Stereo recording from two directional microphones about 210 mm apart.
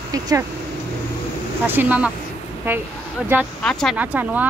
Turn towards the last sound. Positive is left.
turn(degrees=-5)  # may be behind; listen again after turning